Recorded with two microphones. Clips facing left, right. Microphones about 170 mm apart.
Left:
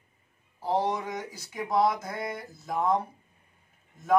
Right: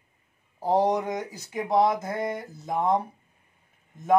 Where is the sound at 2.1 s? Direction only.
15° right (ahead or behind).